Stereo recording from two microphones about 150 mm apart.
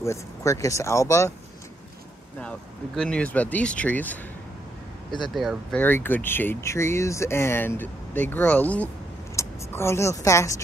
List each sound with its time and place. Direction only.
0.0 s speech: 20° left (ahead or behind)
3.0 s speech: 5° left (ahead or behind)
5.3 s speech: centre (ahead or behind)
5.8 s speech: 15° left (ahead or behind)